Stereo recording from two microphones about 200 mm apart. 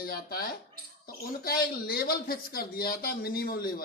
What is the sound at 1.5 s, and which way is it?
Speech, 50° left (ahead or behind).